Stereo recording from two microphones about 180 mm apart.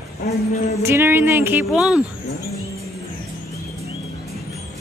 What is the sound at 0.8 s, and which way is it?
A woman's voice, 15° right (ahead or behind).